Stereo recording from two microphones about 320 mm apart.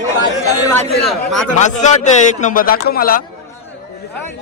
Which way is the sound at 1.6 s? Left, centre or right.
Left.